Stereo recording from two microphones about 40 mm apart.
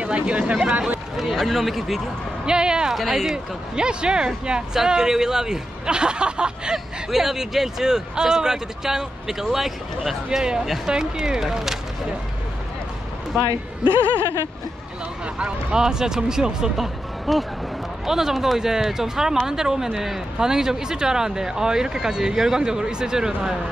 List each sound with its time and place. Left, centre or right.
0.0 s speech: right
1.3 s a man's voice: centre
2.4 s speech: right
2.9 s speech: centre
3.7 s speech: right
6.7 s speech: centre
10.4 s speech: centre
15.3 s speech: right
15.8 s speech: centre